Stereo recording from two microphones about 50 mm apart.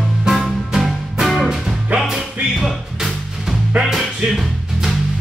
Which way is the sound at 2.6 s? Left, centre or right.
Centre.